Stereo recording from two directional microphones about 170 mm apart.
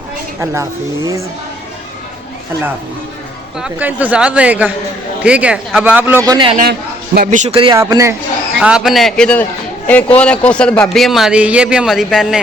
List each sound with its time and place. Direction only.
0.3 s speech: 15° right (ahead or behind)
3.6 s speech: 10° right (ahead or behind)
6.2 s a man's voice: 25° right (ahead or behind)
6.6 s a man's voice: 65° right (ahead or behind)
7.3 s a man's voice: 45° right (ahead or behind)
7.5 s speech: 30° right (ahead or behind)
7.8 s a man's voice: 20° right (ahead or behind)
8.6 s a man's voice: 5° right (ahead or behind)